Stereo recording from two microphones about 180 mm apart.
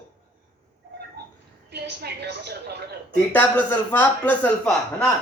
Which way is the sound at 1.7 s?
65° right (ahead or behind).